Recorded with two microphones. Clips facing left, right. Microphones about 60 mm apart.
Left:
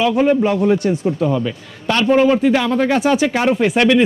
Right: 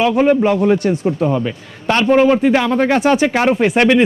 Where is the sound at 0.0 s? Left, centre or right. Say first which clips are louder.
Right 2 dB; right.